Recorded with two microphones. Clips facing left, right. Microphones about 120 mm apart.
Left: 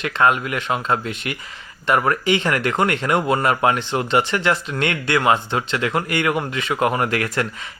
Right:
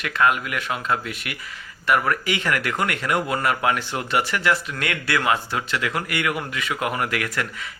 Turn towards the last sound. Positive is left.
turn(degrees=30)  # may be behind; listen again after turning